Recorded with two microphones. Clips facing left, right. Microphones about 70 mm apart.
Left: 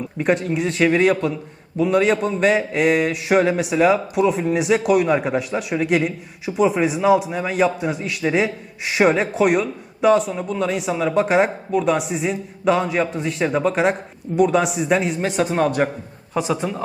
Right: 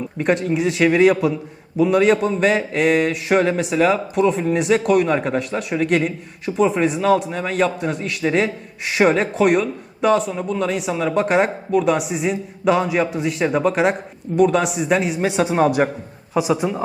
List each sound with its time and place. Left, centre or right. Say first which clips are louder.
0.2 s a man's voice: right 1 dB; centre